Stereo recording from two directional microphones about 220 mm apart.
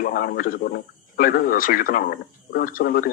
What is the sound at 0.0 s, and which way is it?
Speech, 40° left (ahead or behind).